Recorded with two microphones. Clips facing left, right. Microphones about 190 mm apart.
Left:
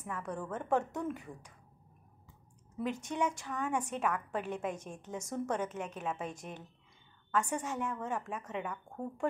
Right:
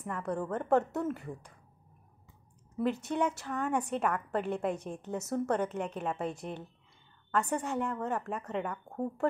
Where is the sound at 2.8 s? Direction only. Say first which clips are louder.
Right 4 dB; 10° left (ahead or behind).